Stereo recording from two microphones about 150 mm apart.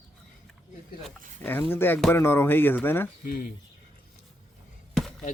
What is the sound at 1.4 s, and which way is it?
Speech, 15° left (ahead or behind).